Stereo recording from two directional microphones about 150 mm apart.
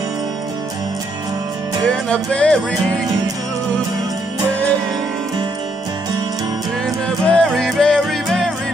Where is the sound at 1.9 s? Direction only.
5° left (ahead or behind).